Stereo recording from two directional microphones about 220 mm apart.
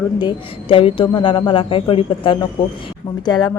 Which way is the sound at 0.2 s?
20° left (ahead or behind).